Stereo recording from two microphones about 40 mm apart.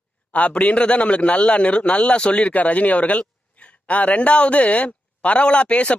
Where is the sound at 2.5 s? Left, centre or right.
Left.